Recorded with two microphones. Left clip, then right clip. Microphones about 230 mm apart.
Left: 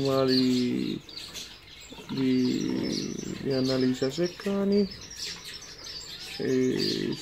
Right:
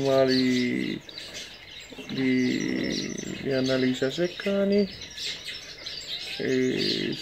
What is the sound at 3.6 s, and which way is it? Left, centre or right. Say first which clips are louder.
Speech: right 2 dB; left.